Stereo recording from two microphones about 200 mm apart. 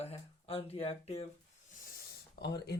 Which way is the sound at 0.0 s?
30° left (ahead or behind).